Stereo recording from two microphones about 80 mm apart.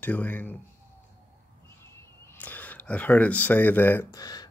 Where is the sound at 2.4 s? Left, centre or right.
Left.